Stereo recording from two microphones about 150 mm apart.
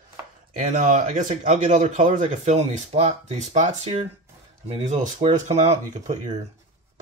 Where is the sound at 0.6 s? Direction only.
60° right (ahead or behind).